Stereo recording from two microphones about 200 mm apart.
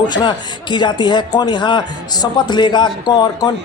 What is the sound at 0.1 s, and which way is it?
A man's voice, 20° left (ahead or behind).